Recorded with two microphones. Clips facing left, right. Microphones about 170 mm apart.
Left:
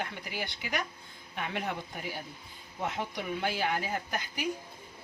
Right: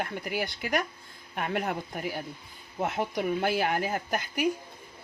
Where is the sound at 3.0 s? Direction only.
45° right (ahead or behind).